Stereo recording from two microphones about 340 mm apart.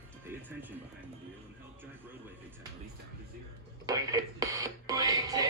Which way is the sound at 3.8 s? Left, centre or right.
Centre.